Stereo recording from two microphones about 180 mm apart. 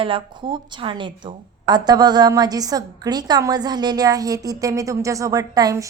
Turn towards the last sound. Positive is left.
turn(degrees=-20)  # may be behind; listen again after turning